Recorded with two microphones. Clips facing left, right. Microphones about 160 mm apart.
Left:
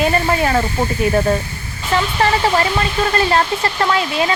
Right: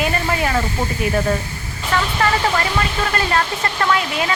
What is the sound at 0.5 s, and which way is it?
Speech, 60° left (ahead or behind).